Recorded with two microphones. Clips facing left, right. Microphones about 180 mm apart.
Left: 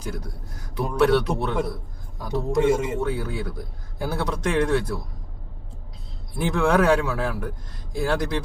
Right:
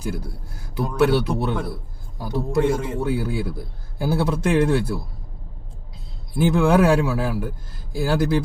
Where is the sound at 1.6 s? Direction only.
30° right (ahead or behind).